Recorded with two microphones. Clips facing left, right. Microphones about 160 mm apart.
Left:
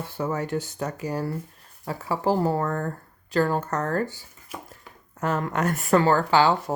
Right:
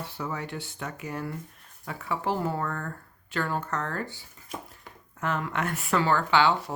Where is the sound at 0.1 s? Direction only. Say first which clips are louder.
Left 12 dB; 45° left (ahead or behind).